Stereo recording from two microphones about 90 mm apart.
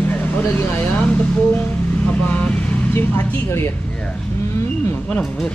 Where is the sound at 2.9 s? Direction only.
25° left (ahead or behind).